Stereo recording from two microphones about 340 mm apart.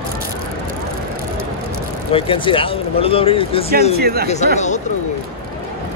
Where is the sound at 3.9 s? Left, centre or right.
Right.